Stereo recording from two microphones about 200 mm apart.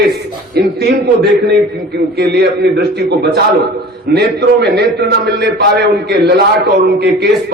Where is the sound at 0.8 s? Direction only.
55° right (ahead or behind).